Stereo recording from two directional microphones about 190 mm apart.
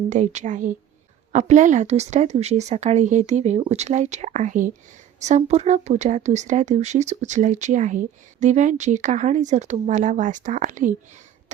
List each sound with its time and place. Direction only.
0.1 s speech: 40° right (ahead or behind)